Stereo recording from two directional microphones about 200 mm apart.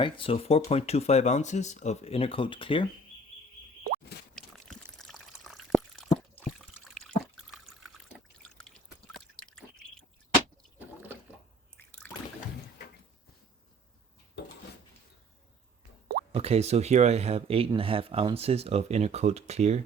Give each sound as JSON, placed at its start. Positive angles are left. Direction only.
{"t": 0.0, "sound": "speech", "side_deg": 25}
{"t": 4.4, "sound": "water", "side_deg": 0}
{"t": 9.1, "sound": "drip", "side_deg": 5}
{"t": 10.8, "sound": "liquid", "side_deg": -10}
{"t": 11.8, "sound": "water", "side_deg": 10}
{"t": 14.4, "sound": "a sound", "side_deg": 60}
{"t": 16.3, "sound": "speech", "side_deg": -30}